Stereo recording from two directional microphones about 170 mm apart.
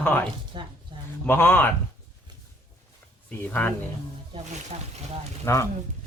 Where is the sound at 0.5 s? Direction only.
30° right (ahead or behind).